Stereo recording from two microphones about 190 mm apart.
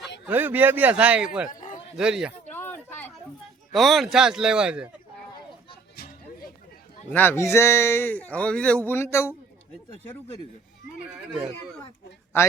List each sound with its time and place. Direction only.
0.3 s a man's voice: 10° right (ahead or behind)
1.5 s a sound: 45° left (ahead or behind)
2.0 s speech: 5° right (ahead or behind)
2.5 s a sound: 10° left (ahead or behind)
3.7 s speech: centre (ahead or behind)
6.0 s music: 50° left (ahead or behind)
7.1 s speech: 10° left (ahead or behind)
12.3 s speech: 10° left (ahead or behind)